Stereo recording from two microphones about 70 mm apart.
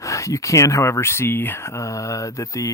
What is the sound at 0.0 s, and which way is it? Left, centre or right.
Speech, left.